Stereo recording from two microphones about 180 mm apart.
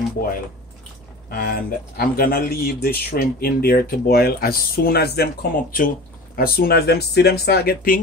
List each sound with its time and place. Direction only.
1.3 s speech: 55° left (ahead or behind)